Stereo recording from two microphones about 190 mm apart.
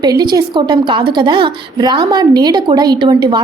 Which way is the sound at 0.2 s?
20° right (ahead or behind).